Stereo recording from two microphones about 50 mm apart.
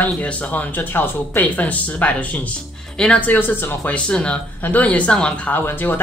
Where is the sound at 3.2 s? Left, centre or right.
Left.